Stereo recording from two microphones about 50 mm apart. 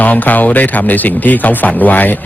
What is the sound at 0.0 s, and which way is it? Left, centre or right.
A man's voice, left.